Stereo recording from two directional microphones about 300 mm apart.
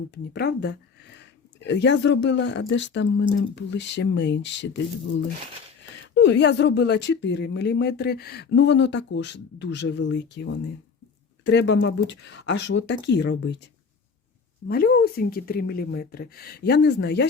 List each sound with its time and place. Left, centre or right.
0.1 s speech: left
6.1 s speech: left
14.7 s speech: left